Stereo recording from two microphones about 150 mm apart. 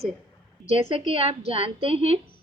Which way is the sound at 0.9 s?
40° right (ahead or behind).